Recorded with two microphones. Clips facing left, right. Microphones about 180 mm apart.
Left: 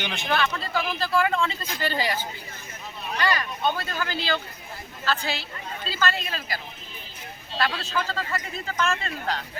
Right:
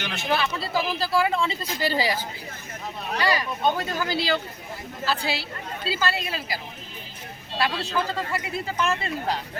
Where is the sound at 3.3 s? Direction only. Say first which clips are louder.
Right 2 dB; 15° right (ahead or behind).